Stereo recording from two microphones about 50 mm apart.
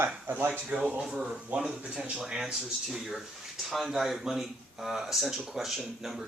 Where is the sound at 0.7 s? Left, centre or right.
Right.